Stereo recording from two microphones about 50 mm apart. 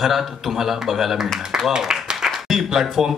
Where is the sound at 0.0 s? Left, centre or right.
Centre.